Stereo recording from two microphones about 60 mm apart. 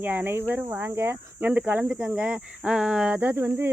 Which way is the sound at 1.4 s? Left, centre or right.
Right.